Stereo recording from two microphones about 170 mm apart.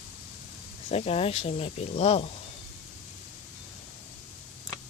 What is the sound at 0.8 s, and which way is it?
Speech, 35° left (ahead or behind).